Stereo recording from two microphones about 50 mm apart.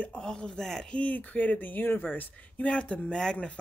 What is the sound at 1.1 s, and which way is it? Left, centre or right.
Speech, left.